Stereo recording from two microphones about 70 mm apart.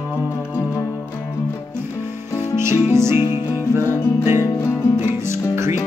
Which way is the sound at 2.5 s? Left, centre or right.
Right.